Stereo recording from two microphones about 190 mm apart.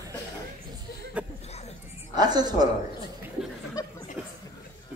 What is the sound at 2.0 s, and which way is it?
Speech, 20° right (ahead or behind).